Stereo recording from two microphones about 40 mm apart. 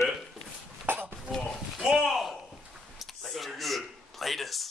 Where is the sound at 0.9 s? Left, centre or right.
Right.